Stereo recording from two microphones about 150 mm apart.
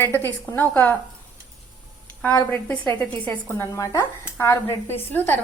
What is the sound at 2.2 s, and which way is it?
A woman's voice, 10° left (ahead or behind).